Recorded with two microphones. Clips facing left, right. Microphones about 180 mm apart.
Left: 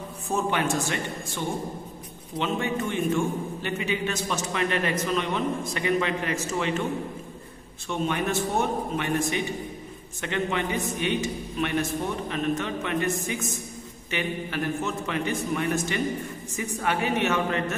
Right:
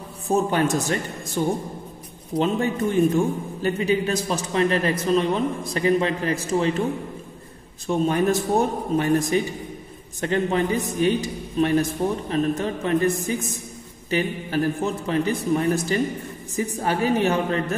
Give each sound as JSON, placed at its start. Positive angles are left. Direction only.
{"t": 0.3, "sound": "a man's voice", "side_deg": -40}